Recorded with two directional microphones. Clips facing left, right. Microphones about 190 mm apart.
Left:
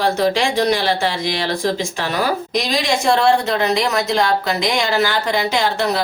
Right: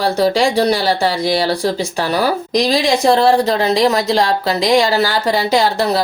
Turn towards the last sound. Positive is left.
turn(degrees=-35)  # may be behind; listen again after turning